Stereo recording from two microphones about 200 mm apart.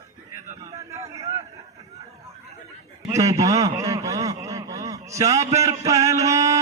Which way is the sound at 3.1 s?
15° right (ahead or behind).